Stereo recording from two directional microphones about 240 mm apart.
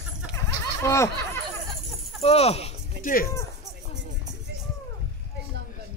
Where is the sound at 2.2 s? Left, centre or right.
Left.